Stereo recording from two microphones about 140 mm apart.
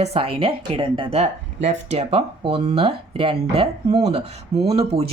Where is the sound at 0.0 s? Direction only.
45° right (ahead or behind).